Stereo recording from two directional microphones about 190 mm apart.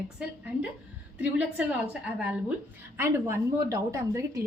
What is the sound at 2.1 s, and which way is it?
A woman's voice, 5° right (ahead or behind).